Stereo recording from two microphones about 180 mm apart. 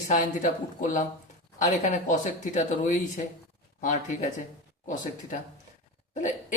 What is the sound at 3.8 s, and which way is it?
Speech, 45° left (ahead or behind).